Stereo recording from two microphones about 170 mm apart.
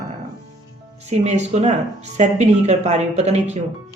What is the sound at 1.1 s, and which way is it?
Speech, 40° right (ahead or behind).